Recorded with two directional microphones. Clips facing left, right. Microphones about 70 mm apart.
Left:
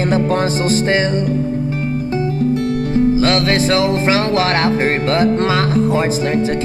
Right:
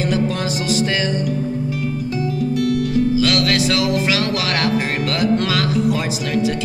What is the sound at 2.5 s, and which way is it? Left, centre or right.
Music, left.